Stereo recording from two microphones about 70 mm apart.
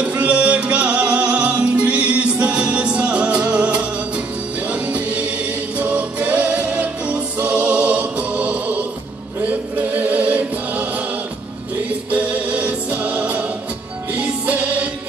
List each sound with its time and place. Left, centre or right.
0.0 s music: centre
9.5 s chant: right
12.1 s music: right